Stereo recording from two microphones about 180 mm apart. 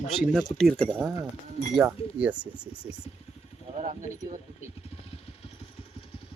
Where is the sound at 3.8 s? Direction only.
45° right (ahead or behind).